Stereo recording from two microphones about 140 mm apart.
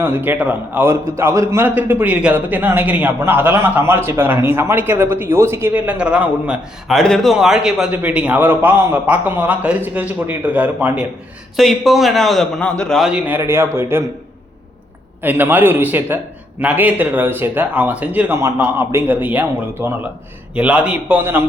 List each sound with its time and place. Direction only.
0.0 s a man's voice: 15° right (ahead or behind)
11.5 s a man's voice: centre (ahead or behind)
13.1 s a man's voice: 10° right (ahead or behind)
15.2 s a man's voice: 15° right (ahead or behind)